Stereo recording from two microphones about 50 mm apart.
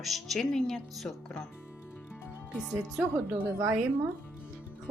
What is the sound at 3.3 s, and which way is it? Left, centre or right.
Speech, right.